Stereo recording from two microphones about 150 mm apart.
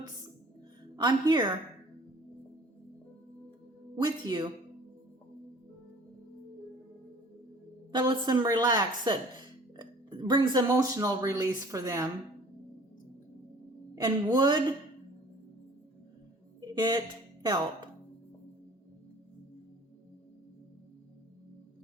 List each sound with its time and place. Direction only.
0.9 s speech: 30° right (ahead or behind)
3.9 s speech: 30° right (ahead or behind)
7.9 s speech: 30° right (ahead or behind)
13.9 s speech: 25° right (ahead or behind)
16.6 s music: 25° right (ahead or behind)
17.4 s speech: 30° right (ahead or behind)